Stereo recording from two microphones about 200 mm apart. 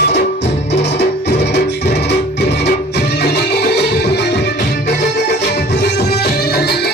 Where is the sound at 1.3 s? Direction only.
55° left (ahead or behind).